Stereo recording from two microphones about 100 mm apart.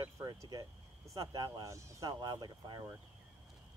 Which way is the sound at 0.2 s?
40° right (ahead or behind).